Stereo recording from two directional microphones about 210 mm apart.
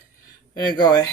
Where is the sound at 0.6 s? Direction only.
20° left (ahead or behind).